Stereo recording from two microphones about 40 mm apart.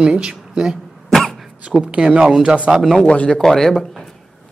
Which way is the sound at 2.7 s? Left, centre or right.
Centre.